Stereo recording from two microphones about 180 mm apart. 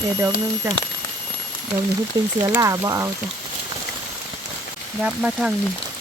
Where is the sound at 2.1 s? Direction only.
20° right (ahead or behind).